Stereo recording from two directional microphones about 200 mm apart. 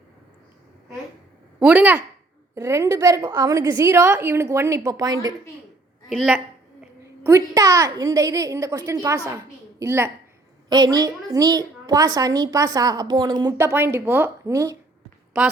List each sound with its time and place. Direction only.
1.5 s a child's voice: 5° right (ahead or behind)
6.1 s a woman's voice: 5° right (ahead or behind)
7.0 s a child's voice: 15° right (ahead or behind)